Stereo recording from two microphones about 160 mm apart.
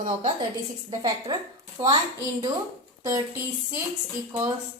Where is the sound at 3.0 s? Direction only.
20° right (ahead or behind).